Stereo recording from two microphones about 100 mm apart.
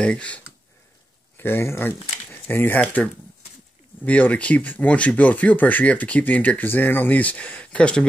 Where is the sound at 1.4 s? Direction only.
25° left (ahead or behind).